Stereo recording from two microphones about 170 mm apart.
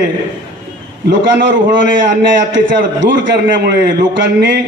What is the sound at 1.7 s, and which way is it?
A man's voice, 90° right.